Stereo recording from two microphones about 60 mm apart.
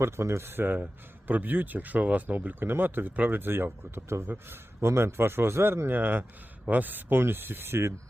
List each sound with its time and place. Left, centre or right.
0.0 s speech: right